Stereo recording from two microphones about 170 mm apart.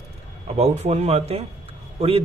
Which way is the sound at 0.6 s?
40° right (ahead or behind).